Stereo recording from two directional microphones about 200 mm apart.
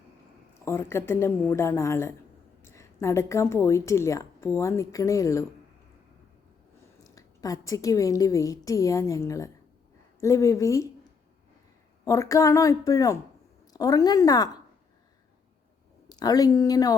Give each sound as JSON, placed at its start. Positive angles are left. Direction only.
{"t": 0.6, "sound": "a woman's voice", "side_deg": 15}
{"t": 7.0, "sound": "a woman's voice", "side_deg": 15}
{"t": 12.0, "sound": "a woman's voice", "side_deg": 15}
{"t": 16.0, "sound": "speech", "side_deg": 20}